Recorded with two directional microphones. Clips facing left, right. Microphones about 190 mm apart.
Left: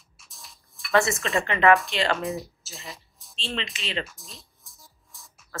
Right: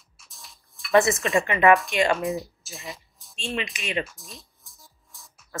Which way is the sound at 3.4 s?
15° right (ahead or behind).